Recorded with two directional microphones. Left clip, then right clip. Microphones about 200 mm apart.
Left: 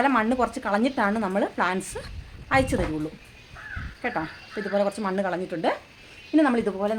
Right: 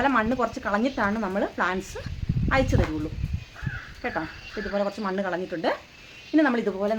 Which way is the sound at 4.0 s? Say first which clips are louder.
Left 2 dB; 30° left (ahead or behind).